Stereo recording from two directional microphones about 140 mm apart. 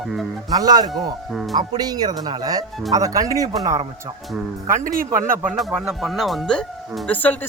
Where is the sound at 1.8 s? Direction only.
25° right (ahead or behind).